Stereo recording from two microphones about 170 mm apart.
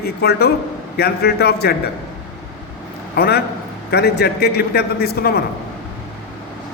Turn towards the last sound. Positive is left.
turn(degrees=65)  # may be behind; listen again after turning